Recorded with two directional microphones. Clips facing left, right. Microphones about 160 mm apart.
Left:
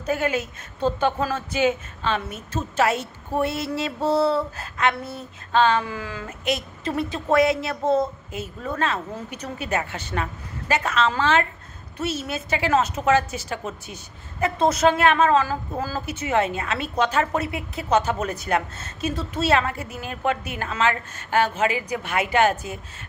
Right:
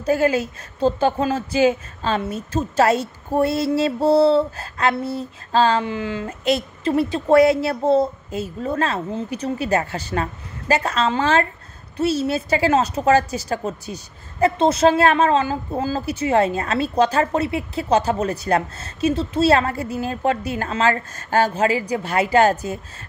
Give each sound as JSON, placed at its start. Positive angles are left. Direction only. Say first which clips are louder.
{"t": 0.0, "sound": "speech", "louder": "right 6 dB", "side_deg": -35}